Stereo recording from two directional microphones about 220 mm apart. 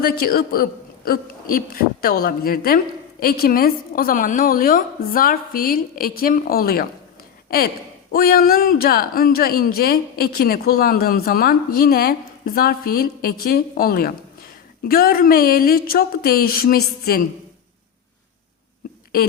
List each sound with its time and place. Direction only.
0.0 s a man's voice: 45° left (ahead or behind)
8.1 s speech: 45° left (ahead or behind)